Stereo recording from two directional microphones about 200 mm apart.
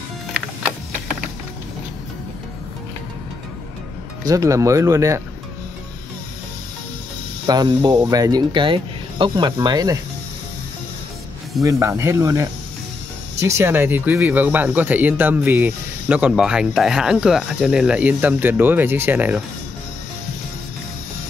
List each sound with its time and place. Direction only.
4.2 s speech: 15° right (ahead or behind)
7.4 s speech: 20° right (ahead or behind)
11.6 s speech: 15° right (ahead or behind)